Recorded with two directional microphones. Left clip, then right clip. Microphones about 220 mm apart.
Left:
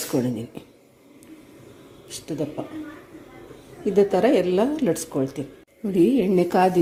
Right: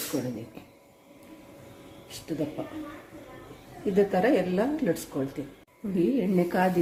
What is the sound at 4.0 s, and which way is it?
A woman's voice, 25° left (ahead or behind).